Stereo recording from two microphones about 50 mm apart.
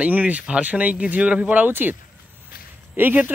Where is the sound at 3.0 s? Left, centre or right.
Right.